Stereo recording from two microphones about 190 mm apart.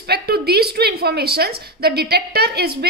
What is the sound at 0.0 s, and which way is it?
A woman's voice, 55° right (ahead or behind).